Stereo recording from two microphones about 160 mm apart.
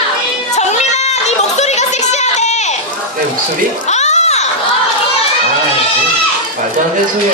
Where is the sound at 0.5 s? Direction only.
45° left (ahead or behind).